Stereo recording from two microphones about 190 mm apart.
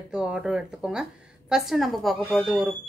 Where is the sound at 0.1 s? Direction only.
5° right (ahead or behind).